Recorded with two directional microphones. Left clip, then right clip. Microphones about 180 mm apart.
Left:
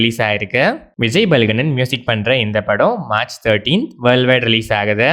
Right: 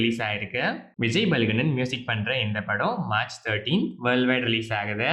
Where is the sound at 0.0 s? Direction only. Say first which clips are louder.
Left 10 dB; 55° left (ahead or behind).